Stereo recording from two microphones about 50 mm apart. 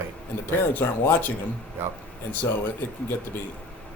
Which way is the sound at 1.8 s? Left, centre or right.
Right.